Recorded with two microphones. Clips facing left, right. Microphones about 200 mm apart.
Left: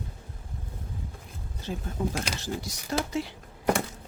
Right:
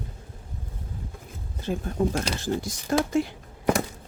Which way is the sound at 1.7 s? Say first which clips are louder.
Right 6 dB; 60° right (ahead or behind).